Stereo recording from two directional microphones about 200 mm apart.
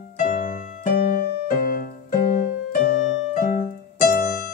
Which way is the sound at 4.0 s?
45° left (ahead or behind).